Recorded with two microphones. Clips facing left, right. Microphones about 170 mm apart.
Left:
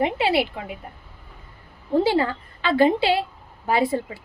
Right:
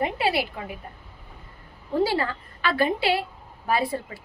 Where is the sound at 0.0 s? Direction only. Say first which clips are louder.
Left 4 dB; 25° left (ahead or behind).